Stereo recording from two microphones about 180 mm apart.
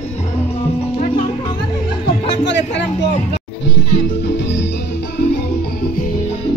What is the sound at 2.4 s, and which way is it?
Speech, 75° left (ahead or behind).